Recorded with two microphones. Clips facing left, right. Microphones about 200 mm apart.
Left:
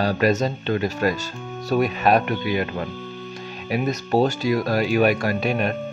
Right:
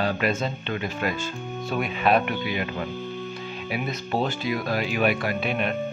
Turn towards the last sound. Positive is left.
turn(degrees=40)  # may be behind; listen again after turning